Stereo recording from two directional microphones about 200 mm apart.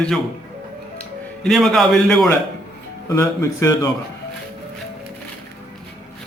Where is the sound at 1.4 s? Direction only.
Centre (ahead or behind).